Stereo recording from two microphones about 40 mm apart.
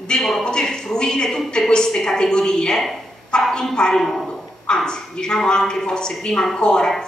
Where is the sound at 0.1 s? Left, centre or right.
Centre.